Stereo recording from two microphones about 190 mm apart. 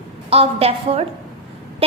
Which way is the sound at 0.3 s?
30° right (ahead or behind).